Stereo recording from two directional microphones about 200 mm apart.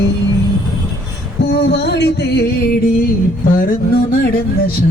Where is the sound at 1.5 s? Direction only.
55° left (ahead or behind).